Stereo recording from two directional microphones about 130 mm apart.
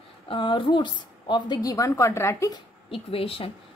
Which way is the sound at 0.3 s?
40° left (ahead or behind).